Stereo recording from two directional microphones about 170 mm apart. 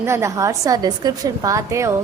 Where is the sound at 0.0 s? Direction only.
15° right (ahead or behind).